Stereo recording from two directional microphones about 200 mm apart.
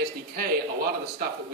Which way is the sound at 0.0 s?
50° right (ahead or behind).